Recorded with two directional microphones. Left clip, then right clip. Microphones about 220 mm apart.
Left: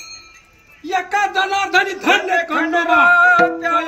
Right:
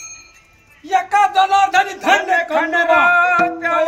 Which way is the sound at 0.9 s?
15° right (ahead or behind).